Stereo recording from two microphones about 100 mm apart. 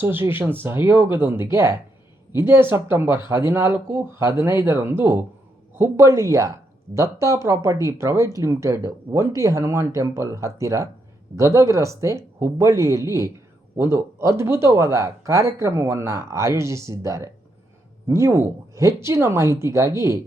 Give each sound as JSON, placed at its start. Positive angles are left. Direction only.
{"t": 0.0, "sound": "speech", "side_deg": -20}